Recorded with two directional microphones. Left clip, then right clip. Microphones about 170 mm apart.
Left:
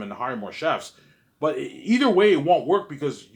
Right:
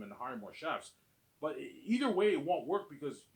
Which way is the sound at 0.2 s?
40° left (ahead or behind).